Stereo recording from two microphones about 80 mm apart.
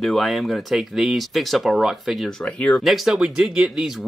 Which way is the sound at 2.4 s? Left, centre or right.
Centre.